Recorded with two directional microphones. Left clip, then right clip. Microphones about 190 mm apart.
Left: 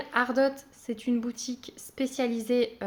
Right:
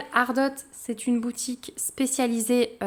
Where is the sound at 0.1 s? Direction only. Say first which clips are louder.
Right 2 dB; 25° right (ahead or behind).